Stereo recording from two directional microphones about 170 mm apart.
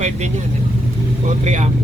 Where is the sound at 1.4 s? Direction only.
40° right (ahead or behind).